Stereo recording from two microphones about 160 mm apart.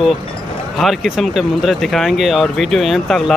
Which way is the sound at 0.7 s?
Centre (ahead or behind).